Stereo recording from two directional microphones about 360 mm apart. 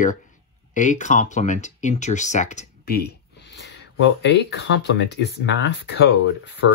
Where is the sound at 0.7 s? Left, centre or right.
Centre.